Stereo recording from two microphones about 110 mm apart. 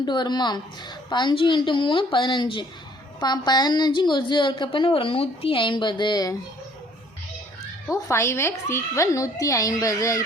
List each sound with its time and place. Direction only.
0.0 s a woman's voice: 40° left (ahead or behind)
7.9 s a woman's voice: 25° left (ahead or behind)